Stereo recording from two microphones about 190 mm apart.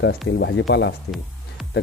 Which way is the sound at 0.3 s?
65° left (ahead or behind).